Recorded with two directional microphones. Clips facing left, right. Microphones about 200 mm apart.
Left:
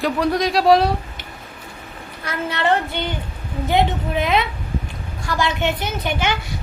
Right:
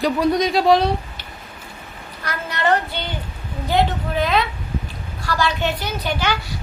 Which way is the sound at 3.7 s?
20° left (ahead or behind).